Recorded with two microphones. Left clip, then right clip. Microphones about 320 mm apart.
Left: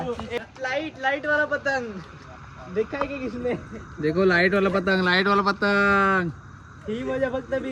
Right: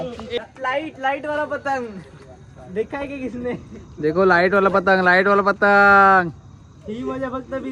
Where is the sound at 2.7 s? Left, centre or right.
Right.